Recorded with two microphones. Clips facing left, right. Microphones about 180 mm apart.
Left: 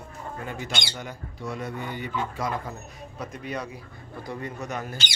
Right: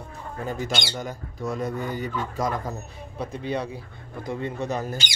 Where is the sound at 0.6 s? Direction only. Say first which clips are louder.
Right 5 dB; 45° right (ahead or behind).